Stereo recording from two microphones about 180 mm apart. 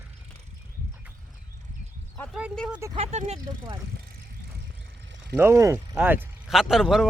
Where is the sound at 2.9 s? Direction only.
35° right (ahead or behind).